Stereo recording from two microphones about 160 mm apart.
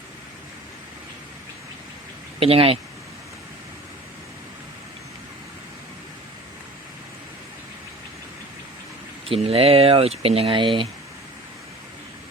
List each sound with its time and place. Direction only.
2.4 s speech: 35° right (ahead or behind)
9.3 s speech: 35° right (ahead or behind)